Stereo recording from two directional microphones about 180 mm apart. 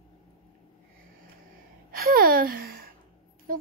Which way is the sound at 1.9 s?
55° right (ahead or behind).